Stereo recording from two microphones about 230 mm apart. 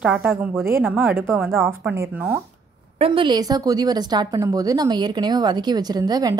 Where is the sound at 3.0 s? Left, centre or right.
Right.